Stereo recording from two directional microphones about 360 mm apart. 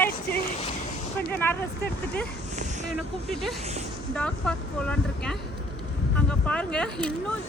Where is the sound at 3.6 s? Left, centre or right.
Centre.